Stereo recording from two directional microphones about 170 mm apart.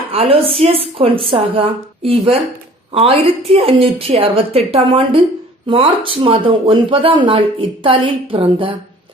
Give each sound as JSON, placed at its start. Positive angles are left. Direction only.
{"t": 0.1, "sound": "speech", "side_deg": -35}